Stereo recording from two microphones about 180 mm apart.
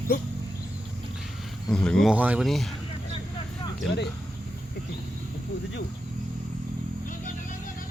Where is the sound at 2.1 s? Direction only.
10° right (ahead or behind).